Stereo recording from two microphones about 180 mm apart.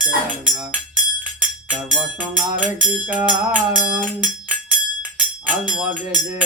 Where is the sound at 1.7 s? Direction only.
45° right (ahead or behind).